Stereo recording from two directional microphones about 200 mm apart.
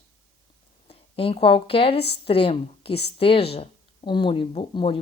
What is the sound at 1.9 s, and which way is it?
Speech, 55° left (ahead or behind).